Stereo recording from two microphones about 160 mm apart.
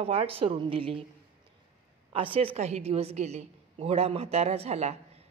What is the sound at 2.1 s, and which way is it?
A woman's voice, 35° right (ahead or behind).